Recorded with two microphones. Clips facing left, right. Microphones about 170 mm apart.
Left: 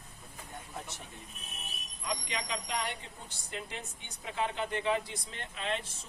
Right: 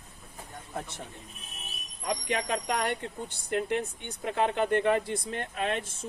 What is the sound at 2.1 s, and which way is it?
Speech, 55° right (ahead or behind).